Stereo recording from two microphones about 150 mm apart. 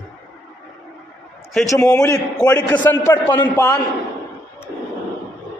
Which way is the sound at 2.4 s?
25° left (ahead or behind).